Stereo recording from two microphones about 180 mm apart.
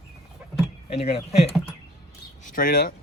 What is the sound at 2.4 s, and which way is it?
Speech, 50° left (ahead or behind).